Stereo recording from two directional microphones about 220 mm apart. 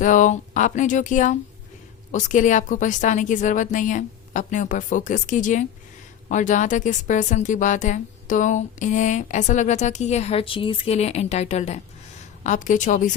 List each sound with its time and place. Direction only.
0.0 s speech: 35° left (ahead or behind)